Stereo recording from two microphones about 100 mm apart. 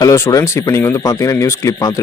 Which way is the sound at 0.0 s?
35° left (ahead or behind).